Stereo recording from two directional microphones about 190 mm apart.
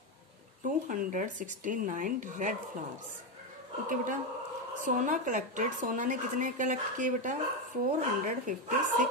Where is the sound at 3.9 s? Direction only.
45° right (ahead or behind).